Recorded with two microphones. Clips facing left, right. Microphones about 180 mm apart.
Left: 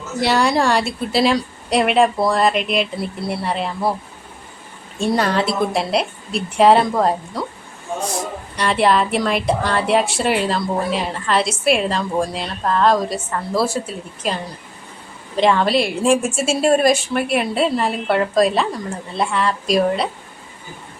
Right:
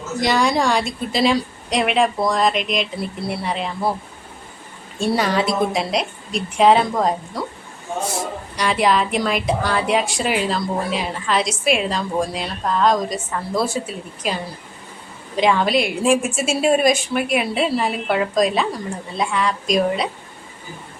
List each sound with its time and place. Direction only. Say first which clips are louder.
0.4 s a woman's voice: left 1 dB; 5° left (ahead or behind)
4.9 s a woman's voice: left 1 dB; 10° right (ahead or behind)
5.5 s a woman's voice: left 1 dB; centre (ahead or behind)
8.5 s a woman's voice: left 2 dB; centre (ahead or behind)
15.4 s a woman's voice: left 1 dB; centre (ahead or behind)